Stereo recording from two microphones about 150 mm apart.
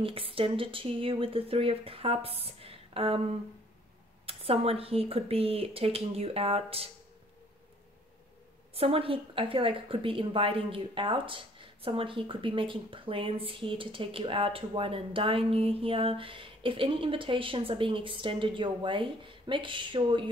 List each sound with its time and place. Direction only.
0.0 s a woman's voice: 40° right (ahead or behind)
4.3 s a woman's voice: 40° right (ahead or behind)
8.7 s a woman's voice: 40° right (ahead or behind)